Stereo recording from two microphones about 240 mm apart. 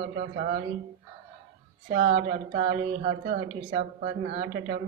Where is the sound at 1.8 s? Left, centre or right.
Right.